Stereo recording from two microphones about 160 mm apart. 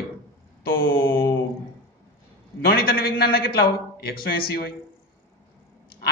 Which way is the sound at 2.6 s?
80° left.